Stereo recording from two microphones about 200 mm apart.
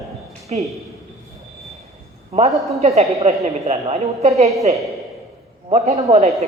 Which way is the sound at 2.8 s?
35° right (ahead or behind).